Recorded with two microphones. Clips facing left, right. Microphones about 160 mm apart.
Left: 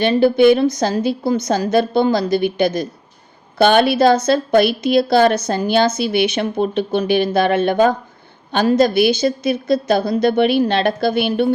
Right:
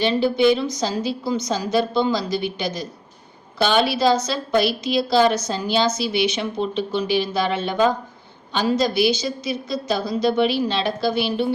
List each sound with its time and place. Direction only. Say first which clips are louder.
0.0 s a woman's voice: left 6 dB; 55° left (ahead or behind)